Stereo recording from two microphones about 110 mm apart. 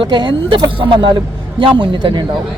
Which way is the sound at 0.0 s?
50° right (ahead or behind).